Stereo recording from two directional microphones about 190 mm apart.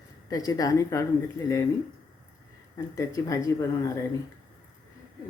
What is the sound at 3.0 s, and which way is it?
Speech, 15° left (ahead or behind).